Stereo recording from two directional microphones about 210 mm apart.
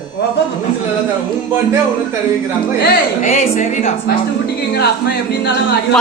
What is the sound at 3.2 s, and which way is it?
Speech, 35° left (ahead or behind).